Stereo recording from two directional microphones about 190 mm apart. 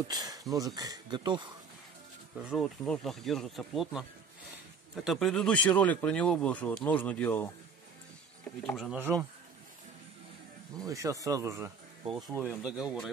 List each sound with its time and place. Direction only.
0.1 s speech: 20° right (ahead or behind)
2.3 s speech: centre (ahead or behind)
5.0 s speech: centre (ahead or behind)
8.6 s speech: centre (ahead or behind)
10.8 s speech: 15° right (ahead or behind)
12.4 s speech: 5° right (ahead or behind)